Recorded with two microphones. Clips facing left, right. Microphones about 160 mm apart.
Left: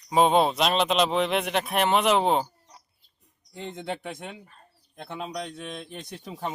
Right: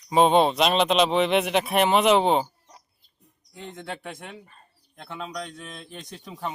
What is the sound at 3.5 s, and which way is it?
Speech, 20° left (ahead or behind).